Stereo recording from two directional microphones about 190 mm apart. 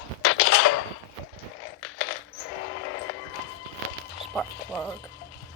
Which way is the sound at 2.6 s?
85° left.